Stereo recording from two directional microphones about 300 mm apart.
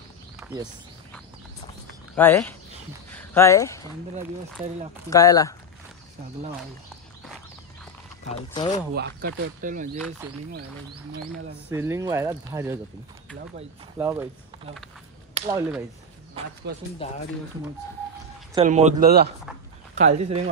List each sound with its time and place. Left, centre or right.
2.1 s speech: centre
5.1 s speech: centre
8.3 s speech: centre
8.9 s speech: right
11.7 s speech: centre
13.9 s speech: centre
15.3 s a sound: centre
16.7 s speech: right
18.5 s speech: right